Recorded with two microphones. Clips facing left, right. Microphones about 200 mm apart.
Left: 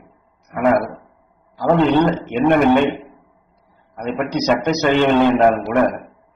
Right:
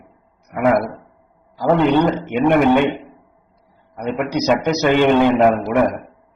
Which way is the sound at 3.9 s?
10° right (ahead or behind).